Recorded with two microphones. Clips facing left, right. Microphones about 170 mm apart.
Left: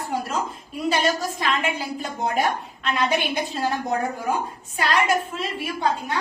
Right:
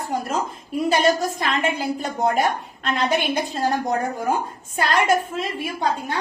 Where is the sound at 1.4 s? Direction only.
45° right (ahead or behind).